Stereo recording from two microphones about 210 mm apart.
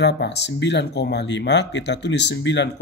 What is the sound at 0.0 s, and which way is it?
Speech, 55° left (ahead or behind).